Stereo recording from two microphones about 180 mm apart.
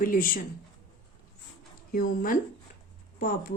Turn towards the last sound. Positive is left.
turn(degrees=55)  # may be behind; listen again after turning